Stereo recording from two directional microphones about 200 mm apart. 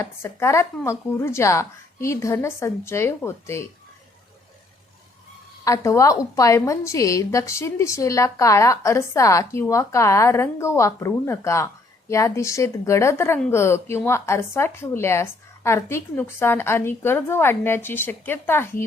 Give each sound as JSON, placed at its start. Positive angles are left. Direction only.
{"t": 0.0, "sound": "a woman's voice", "side_deg": 15}
{"t": 5.6, "sound": "a woman's voice", "side_deg": 15}